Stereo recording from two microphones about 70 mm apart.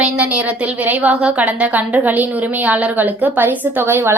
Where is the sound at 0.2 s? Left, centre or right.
Right.